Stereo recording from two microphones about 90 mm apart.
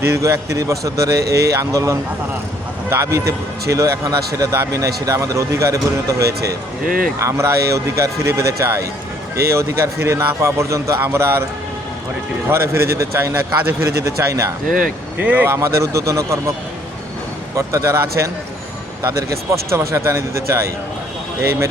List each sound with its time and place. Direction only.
0.0 s speech: 30° right (ahead or behind)
12.5 s speech: 30° right (ahead or behind)
15.2 s speech: 15° right (ahead or behind)
15.4 s speech: 35° right (ahead or behind)
17.7 s a man's voice: 30° right (ahead or behind)